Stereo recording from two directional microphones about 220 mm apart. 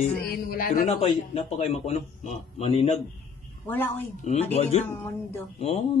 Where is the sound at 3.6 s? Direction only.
10° left (ahead or behind).